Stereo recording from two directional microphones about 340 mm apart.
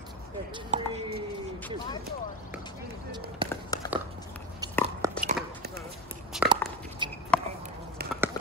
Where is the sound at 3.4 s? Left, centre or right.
Centre.